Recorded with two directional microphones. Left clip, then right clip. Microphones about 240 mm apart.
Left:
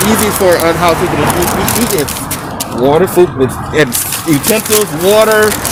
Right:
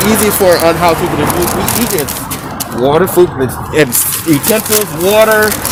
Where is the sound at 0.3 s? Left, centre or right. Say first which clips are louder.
Right 2 dB; right.